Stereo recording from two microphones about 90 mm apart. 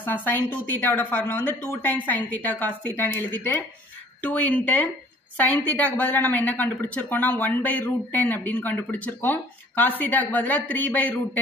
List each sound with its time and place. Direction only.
0.0 s a woman's voice: 20° left (ahead or behind)